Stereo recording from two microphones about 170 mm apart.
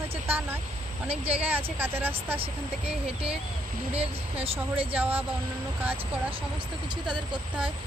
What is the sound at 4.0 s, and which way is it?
Speech, 35° right (ahead or behind).